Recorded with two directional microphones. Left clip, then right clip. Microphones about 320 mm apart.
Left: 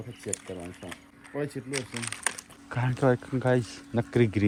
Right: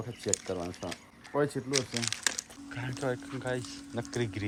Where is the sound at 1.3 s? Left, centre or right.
Centre.